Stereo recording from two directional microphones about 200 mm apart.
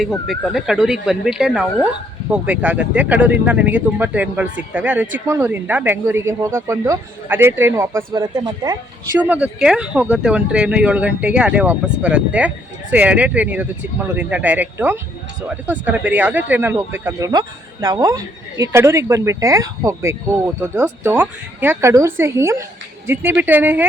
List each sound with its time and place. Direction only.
0.0 s speech: centre (ahead or behind); by 8.8 s 15° right (ahead or behind)
9.3 s speech: 5° right (ahead or behind)